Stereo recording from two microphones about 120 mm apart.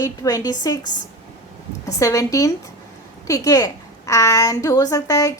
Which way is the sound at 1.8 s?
30° left (ahead or behind).